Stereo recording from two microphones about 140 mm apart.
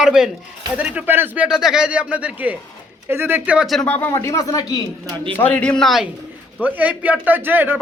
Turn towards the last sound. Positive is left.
turn(degrees=-15)  # may be behind; listen again after turning